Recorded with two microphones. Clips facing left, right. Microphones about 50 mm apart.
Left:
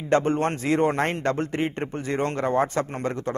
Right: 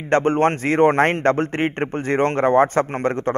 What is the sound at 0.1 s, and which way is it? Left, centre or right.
A man's voice, right.